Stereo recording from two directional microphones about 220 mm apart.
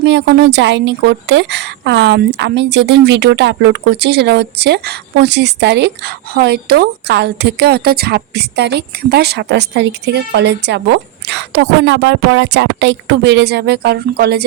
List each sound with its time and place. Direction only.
0.0 s a woman's voice: 50° right (ahead or behind)